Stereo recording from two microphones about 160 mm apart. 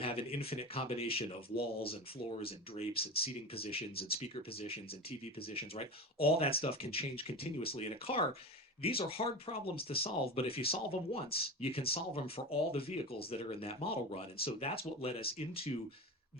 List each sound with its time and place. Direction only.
0.0 s speech: 35° left (ahead or behind)
2.4 s speech: 35° left (ahead or behind)